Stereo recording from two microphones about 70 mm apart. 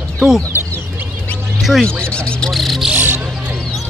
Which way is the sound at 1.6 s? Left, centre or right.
Centre.